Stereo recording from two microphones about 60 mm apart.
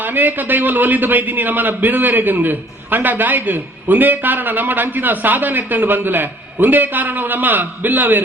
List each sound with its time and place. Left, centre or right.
0.0 s a man's voice: right